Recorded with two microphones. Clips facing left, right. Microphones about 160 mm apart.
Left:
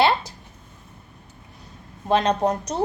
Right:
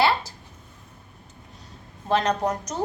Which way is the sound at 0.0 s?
20° left (ahead or behind).